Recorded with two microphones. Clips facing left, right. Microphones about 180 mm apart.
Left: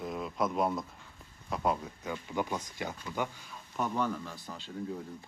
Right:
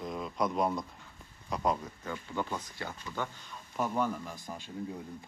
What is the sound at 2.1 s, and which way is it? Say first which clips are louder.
Speech: left 2 dB; 15° left (ahead or behind).